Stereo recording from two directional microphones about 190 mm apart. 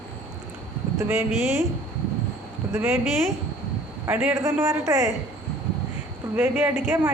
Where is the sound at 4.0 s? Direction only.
10° right (ahead or behind).